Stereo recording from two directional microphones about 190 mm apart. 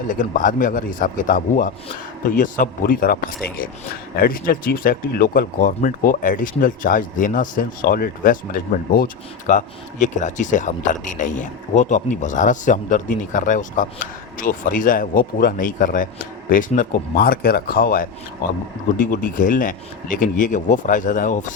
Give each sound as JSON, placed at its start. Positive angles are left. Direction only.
{"t": 0.1, "sound": "speech", "side_deg": 45}